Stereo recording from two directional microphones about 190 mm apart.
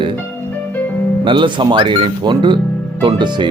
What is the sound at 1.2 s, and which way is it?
Speech, 25° right (ahead or behind).